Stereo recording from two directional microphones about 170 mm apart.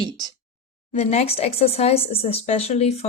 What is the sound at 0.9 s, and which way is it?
Speech, 40° left (ahead or behind).